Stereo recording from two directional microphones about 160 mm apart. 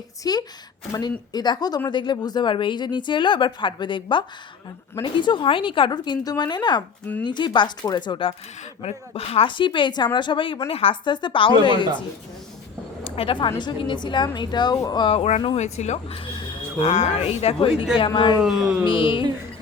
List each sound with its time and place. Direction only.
0.2 s speech: 25° left (ahead or behind)
5.2 s speech: 30° left (ahead or behind)
13.1 s a woman's voice: 35° left (ahead or behind)
16.9 s speech: 45° left (ahead or behind)
18.4 s speech: 5° right (ahead or behind)
18.9 s speech: 30° left (ahead or behind)